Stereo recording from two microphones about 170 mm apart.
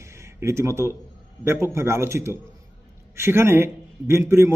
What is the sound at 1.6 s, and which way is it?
A man's voice, 15° right (ahead or behind).